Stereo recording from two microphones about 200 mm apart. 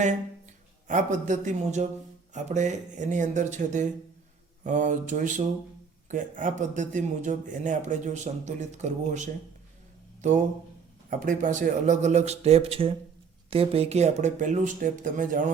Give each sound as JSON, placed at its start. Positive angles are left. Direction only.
{"t": 1.3, "sound": "speech", "side_deg": -35}